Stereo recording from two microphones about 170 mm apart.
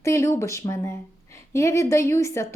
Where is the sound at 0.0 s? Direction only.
15° left (ahead or behind).